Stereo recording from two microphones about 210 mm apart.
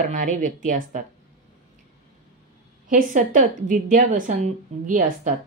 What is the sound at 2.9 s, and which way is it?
Speech, 40° right (ahead or behind).